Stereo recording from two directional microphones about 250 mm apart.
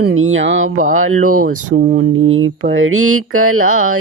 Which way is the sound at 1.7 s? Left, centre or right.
Right.